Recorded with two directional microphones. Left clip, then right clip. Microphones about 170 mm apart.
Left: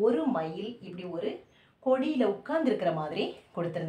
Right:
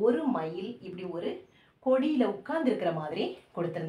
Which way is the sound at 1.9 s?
20° left (ahead or behind).